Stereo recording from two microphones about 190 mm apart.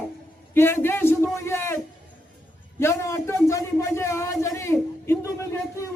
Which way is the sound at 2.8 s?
15° left (ahead or behind).